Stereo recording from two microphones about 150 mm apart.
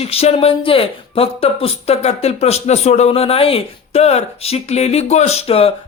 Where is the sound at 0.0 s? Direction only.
45° left (ahead or behind).